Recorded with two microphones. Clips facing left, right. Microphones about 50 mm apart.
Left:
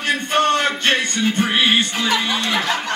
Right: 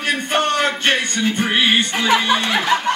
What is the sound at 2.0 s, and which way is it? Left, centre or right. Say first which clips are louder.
Speech: right 4 dB; right.